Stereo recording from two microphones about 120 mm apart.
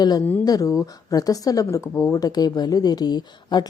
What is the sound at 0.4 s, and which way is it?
Speech, 30° left (ahead or behind).